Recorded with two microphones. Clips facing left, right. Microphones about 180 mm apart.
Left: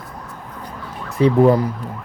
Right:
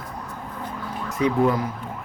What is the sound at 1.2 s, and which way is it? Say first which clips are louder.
Speech: left 6 dB; 30° left (ahead or behind).